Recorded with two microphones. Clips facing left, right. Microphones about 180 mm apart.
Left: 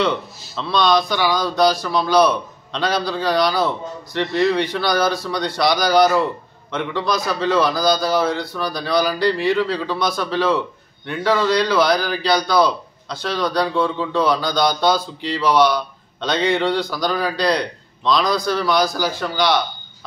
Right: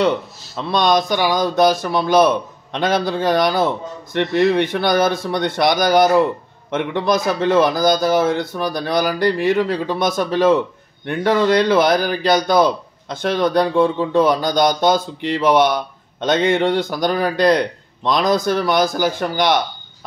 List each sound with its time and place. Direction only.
0.7 s a man's voice: 45° right (ahead or behind)